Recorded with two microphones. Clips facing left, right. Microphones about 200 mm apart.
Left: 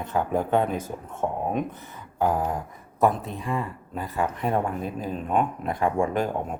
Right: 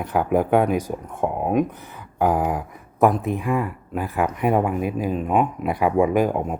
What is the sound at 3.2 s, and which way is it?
Speech, 15° right (ahead or behind).